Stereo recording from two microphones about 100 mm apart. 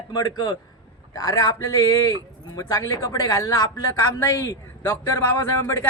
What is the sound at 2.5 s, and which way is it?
A woman's voice, 35° left (ahead or behind).